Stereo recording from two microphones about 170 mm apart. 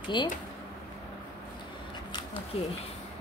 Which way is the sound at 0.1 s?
30° left (ahead or behind).